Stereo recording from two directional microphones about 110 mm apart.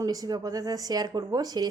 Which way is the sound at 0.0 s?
35° right (ahead or behind).